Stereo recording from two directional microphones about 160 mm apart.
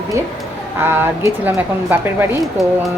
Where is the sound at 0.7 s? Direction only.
15° right (ahead or behind).